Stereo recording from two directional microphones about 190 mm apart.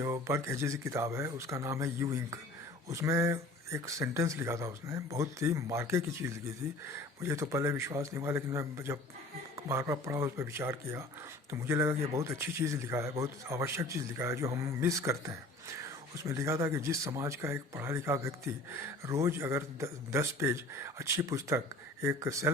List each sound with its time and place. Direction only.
0.0 s speech: 15° right (ahead or behind)